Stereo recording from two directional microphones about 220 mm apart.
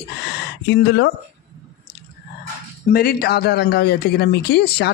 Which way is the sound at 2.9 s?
45° left (ahead or behind).